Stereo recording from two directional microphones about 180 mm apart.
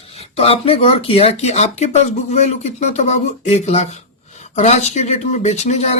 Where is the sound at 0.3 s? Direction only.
35° left (ahead or behind).